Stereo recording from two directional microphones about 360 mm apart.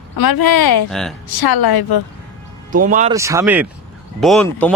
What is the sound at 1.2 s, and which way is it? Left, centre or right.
Speech, left.